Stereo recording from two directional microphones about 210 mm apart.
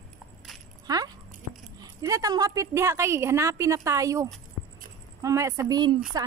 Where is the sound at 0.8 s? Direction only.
20° right (ahead or behind).